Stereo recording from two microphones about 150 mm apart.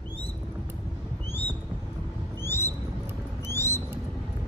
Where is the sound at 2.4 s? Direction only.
15° left (ahead or behind).